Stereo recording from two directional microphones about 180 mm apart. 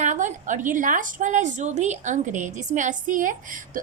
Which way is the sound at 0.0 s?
40° right (ahead or behind).